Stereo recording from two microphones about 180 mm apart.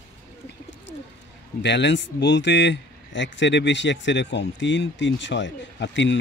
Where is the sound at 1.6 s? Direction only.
75° left (ahead or behind).